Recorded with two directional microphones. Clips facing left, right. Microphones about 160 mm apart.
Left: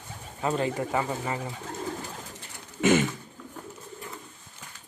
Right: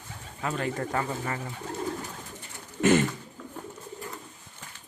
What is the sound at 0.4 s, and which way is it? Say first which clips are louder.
Speech: left 4 dB; 25° left (ahead or behind).